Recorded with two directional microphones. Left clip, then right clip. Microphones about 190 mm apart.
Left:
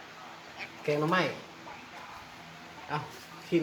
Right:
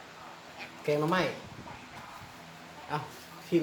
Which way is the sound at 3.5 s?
Centre (ahead or behind).